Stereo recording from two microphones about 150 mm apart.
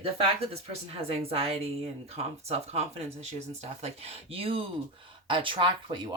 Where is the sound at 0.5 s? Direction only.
45° right (ahead or behind).